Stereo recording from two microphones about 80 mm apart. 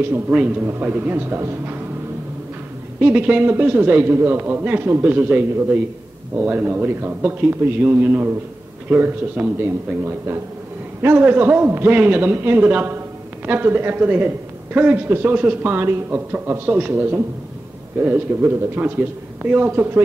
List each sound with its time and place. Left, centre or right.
0.3 s a man's voice: centre
0.7 s a man's voice: right
3.0 s a man's voice: centre
17.9 s a man's voice: right